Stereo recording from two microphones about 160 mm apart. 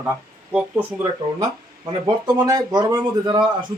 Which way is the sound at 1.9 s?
25° right (ahead or behind).